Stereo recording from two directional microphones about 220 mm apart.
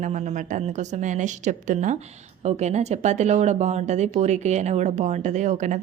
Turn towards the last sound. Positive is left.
turn(degrees=-35)  # may be behind; listen again after turning